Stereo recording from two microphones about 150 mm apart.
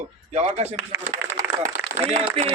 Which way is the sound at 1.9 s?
45° right (ahead or behind).